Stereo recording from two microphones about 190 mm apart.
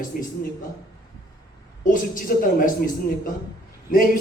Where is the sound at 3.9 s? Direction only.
45° left (ahead or behind).